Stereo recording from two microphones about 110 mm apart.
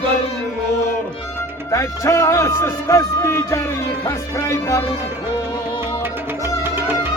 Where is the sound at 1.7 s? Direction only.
30° left (ahead or behind).